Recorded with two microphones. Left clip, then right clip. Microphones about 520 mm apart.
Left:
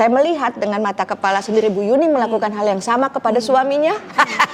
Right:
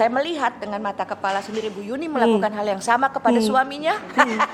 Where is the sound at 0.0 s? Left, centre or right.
Left.